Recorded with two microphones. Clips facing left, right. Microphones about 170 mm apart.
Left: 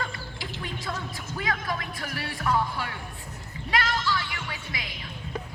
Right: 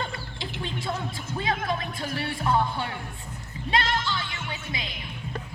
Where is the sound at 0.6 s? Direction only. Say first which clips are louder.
Right 4 dB; 25° right (ahead or behind).